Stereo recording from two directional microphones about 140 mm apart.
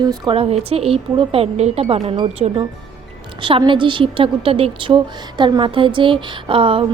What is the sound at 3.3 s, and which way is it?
A woman's voice, 35° right (ahead or behind).